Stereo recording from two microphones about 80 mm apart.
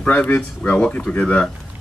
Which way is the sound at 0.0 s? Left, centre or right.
Centre.